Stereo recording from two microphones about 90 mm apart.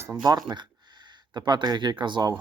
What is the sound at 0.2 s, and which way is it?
Speech, 45° right (ahead or behind).